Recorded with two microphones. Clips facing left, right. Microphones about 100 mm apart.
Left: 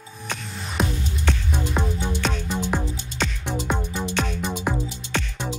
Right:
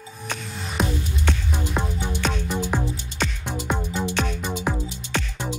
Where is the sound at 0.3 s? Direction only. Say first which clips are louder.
Even; 5° right (ahead or behind).